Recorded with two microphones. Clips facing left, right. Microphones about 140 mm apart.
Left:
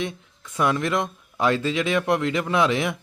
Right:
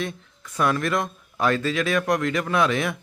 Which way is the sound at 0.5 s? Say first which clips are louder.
Even; 20° left (ahead or behind).